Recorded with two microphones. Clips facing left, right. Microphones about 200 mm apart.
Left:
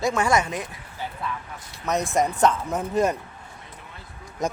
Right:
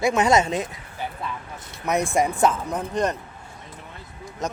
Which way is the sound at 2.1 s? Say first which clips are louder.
Left 1 dB; 10° right (ahead or behind).